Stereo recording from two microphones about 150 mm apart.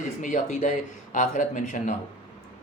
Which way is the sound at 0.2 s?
55° left (ahead or behind).